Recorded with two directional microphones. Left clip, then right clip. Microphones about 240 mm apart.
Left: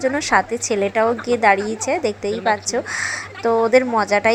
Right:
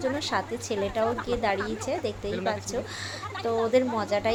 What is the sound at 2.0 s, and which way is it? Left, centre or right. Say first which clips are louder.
Speech: left 10 dB; left.